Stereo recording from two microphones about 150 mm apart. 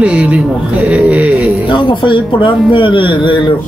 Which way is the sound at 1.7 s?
30° left (ahead or behind).